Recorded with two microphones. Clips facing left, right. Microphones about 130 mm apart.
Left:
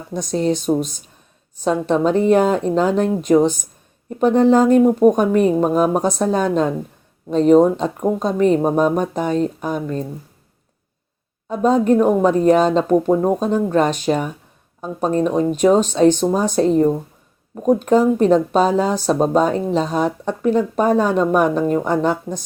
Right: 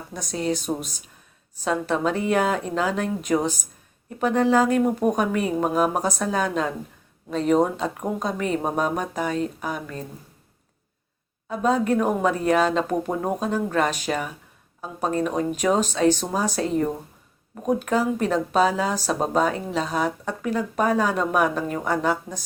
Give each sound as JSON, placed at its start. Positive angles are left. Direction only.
{"t": 0.1, "sound": "speech", "side_deg": 25}
{"t": 11.4, "sound": "speech", "side_deg": 25}
{"t": 15.4, "sound": "speech", "side_deg": 30}